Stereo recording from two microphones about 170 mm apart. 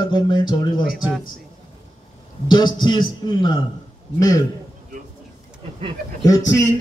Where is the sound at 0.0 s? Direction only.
25° left (ahead or behind).